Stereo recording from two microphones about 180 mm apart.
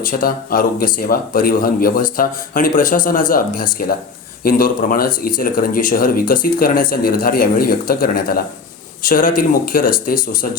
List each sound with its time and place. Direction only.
0.0 s speech: 50° left (ahead or behind)